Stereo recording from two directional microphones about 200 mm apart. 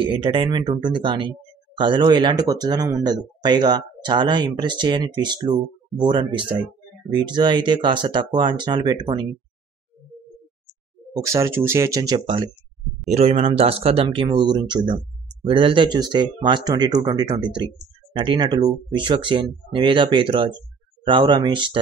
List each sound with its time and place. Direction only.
0.0 s speech: 25° right (ahead or behind)
11.1 s speech: 15° right (ahead or behind)